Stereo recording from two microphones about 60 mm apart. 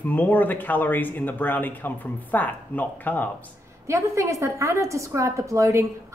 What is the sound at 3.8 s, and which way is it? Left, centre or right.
A woman's voice, right.